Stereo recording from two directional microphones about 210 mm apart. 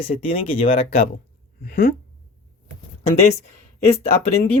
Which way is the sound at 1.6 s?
45° left (ahead or behind).